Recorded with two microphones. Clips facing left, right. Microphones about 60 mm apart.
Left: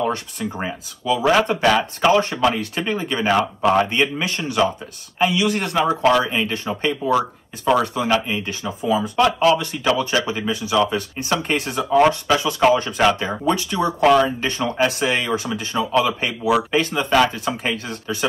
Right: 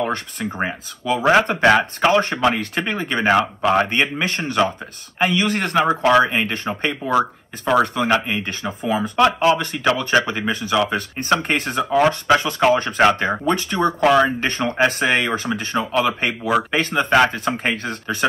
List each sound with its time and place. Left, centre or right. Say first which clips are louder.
0.0 s speech: even; right